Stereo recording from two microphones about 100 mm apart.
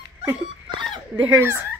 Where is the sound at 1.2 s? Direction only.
25° right (ahead or behind).